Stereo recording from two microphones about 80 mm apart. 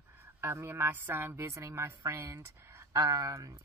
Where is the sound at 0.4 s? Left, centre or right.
Right.